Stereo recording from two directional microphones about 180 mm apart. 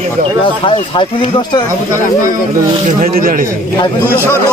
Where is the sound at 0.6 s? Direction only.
30° left (ahead or behind).